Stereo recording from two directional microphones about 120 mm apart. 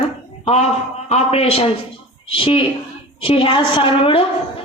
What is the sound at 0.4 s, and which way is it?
A man's voice, 65° left (ahead or behind).